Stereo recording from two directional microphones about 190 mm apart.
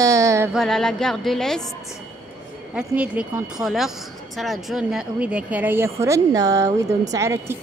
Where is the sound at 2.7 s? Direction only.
5° right (ahead or behind).